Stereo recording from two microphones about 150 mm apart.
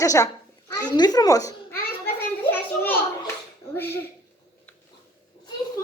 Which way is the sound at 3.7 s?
15° left (ahead or behind).